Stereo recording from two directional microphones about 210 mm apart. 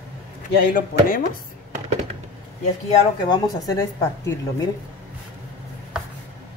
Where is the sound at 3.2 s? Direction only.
20° left (ahead or behind).